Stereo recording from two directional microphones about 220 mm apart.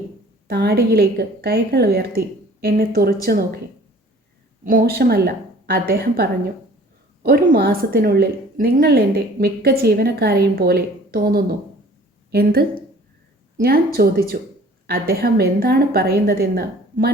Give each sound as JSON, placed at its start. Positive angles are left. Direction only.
{"t": 0.4, "sound": "a woman's voice", "side_deg": -45}
{"t": 4.6, "sound": "a woman's voice", "side_deg": -40}